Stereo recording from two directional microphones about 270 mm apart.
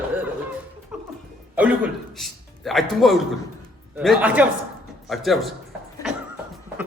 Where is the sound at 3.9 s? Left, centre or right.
Centre.